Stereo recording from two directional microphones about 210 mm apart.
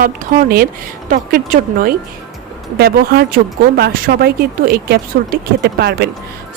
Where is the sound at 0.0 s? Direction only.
45° right (ahead or behind).